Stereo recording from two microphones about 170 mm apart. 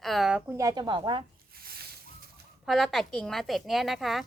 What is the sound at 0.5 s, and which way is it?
Speech, 20° right (ahead or behind).